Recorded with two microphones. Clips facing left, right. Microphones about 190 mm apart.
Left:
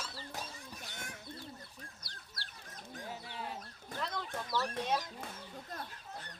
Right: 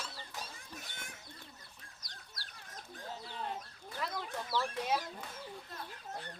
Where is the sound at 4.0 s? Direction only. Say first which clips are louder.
Even; 5° right (ahead or behind).